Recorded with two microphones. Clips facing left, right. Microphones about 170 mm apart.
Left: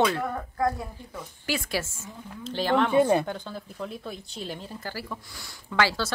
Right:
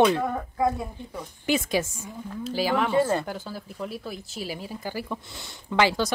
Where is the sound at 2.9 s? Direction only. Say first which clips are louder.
Left 2 dB; 15° left (ahead or behind).